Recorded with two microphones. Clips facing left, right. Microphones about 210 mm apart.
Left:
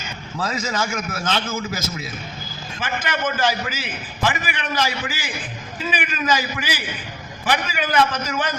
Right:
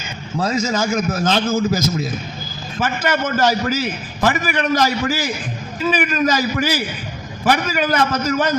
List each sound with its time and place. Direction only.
0.3 s a man's voice: 40° right (ahead or behind)
2.8 s a man's voice: 40° right (ahead or behind)